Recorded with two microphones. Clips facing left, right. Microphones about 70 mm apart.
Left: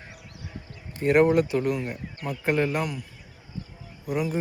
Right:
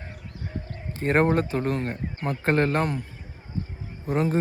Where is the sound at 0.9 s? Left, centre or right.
Right.